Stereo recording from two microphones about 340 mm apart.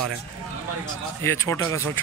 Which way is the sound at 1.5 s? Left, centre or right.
Centre.